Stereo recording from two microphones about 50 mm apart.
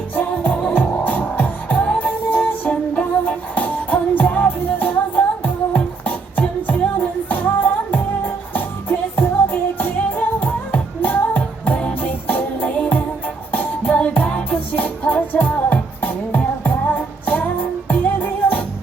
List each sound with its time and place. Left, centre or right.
0.2 s music: left